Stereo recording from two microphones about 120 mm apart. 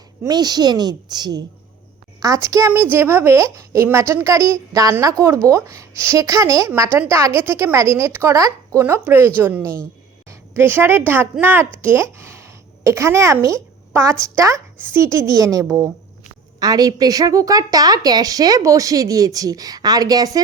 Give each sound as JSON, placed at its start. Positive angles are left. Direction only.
{"t": 0.3, "sound": "a woman's voice", "side_deg": -35}